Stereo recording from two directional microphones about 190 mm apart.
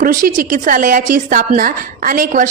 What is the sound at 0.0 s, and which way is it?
A woman's voice, 45° right (ahead or behind).